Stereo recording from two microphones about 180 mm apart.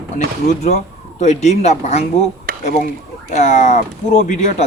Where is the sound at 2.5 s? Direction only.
50° right (ahead or behind).